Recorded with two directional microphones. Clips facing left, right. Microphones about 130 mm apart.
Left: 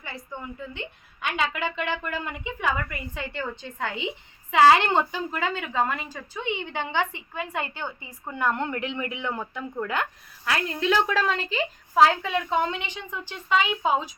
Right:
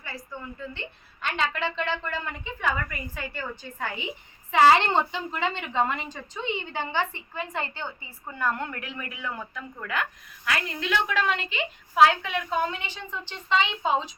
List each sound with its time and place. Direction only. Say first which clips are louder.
0.0 s a woman's voice: left 1 dB; 20° left (ahead or behind)